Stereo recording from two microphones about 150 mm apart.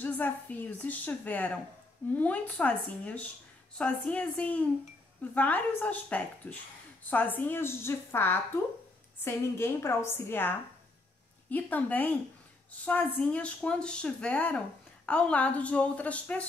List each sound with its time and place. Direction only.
0.0 s a woman's voice: 10° left (ahead or behind)
11.5 s a woman's voice: 10° left (ahead or behind)